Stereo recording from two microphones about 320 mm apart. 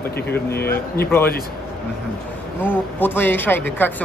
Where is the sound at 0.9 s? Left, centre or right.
Centre.